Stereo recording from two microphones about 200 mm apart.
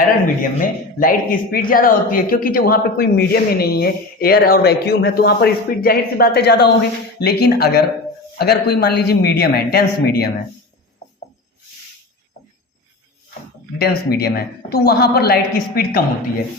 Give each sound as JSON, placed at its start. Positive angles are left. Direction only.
{"t": 0.6, "sound": "a man's voice", "side_deg": 45}
{"t": 13.7, "sound": "a man's voice", "side_deg": 50}